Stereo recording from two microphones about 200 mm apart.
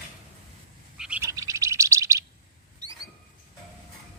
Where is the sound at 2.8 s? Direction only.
20° right (ahead or behind).